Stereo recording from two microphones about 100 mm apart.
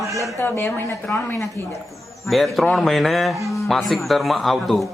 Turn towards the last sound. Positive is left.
turn(degrees=0)  # may be behind; listen again after turning